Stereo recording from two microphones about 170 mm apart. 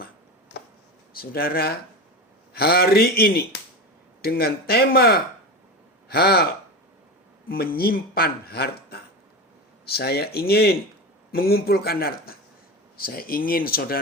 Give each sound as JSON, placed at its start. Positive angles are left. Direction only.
{"t": 1.1, "sound": "speech", "side_deg": 60}